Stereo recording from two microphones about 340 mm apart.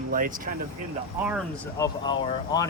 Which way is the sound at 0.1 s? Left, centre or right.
Right.